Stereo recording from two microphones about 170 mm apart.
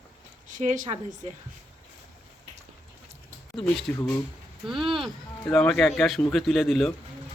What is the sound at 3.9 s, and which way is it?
Speech, 10° left (ahead or behind).